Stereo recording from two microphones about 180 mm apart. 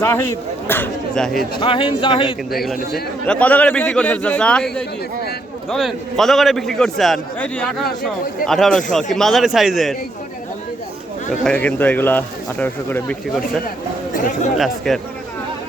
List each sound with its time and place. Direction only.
0.0 s a man's voice: 15° left (ahead or behind)
1.5 s speech: 30° left (ahead or behind)
2.9 s a man's voice: 5° left (ahead or behind)
11.4 s a man's voice: 10° left (ahead or behind)
14.1 s speech: 45° left (ahead or behind)
14.6 s a man's voice: centre (ahead or behind)